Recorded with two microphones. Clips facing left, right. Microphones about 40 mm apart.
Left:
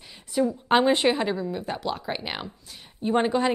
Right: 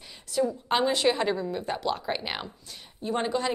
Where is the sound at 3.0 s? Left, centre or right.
Left.